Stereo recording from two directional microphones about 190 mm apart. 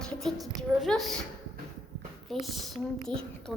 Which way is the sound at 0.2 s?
Centre (ahead or behind).